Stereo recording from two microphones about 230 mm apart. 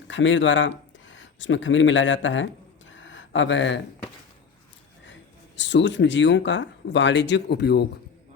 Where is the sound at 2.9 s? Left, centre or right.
Left.